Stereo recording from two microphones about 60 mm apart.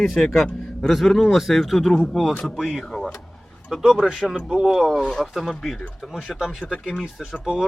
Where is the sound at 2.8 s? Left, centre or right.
Centre.